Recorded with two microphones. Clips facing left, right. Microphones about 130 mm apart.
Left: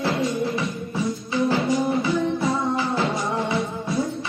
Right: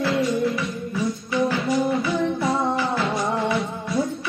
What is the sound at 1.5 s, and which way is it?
Music, 25° left (ahead or behind).